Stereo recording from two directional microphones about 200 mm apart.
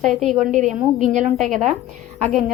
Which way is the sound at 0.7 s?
Centre (ahead or behind).